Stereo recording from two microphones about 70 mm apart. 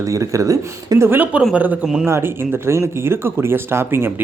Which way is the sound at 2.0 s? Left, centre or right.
Right.